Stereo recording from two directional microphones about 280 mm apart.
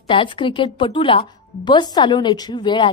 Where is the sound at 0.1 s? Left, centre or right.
Centre.